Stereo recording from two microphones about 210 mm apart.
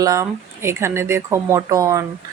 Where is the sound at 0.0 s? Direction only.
15° right (ahead or behind).